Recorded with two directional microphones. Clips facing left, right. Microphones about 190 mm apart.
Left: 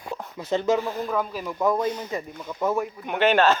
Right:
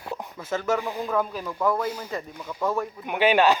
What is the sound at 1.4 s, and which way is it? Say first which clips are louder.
Speech: left 2 dB; 15° left (ahead or behind).